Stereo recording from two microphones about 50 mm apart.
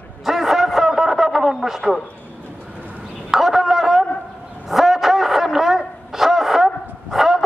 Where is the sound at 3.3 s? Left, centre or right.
Centre.